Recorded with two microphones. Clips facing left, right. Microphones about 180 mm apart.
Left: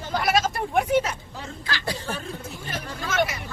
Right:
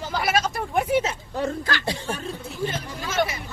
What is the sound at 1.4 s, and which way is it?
Speech, 55° right (ahead or behind).